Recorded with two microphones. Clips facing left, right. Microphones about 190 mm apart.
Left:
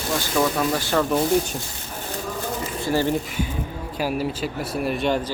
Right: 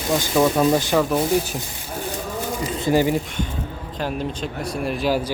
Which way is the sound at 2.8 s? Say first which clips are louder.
Right 3 dB; 15° right (ahead or behind).